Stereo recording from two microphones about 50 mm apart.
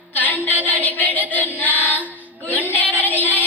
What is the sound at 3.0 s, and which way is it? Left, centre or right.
Music, left.